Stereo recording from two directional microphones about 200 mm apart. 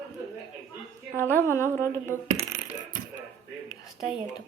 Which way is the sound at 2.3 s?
35° right (ahead or behind).